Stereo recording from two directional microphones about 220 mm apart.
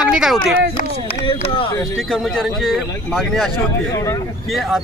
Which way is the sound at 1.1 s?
25° left (ahead or behind).